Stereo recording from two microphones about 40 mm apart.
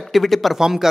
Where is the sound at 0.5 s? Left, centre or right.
Centre.